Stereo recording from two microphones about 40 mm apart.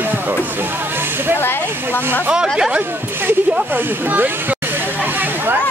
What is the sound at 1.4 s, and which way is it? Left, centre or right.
Speech, left.